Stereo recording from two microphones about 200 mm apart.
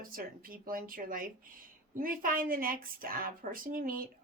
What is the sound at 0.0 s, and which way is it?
Speech, 45° right (ahead or behind).